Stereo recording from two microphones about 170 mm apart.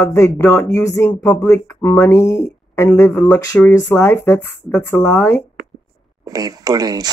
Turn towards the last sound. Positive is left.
turn(degrees=-20)  # may be behind; listen again after turning